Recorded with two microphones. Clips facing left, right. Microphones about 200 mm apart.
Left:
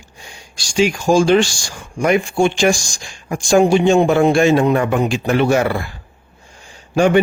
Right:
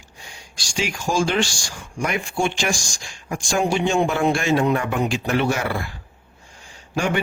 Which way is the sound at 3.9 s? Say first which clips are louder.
Left 7 dB; 75° left (ahead or behind).